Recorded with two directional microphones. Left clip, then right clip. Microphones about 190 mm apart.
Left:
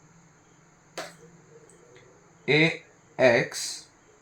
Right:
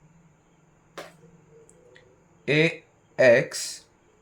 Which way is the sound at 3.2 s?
60° right (ahead or behind).